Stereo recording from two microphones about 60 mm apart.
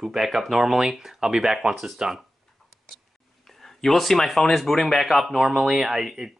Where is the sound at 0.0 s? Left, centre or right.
Centre.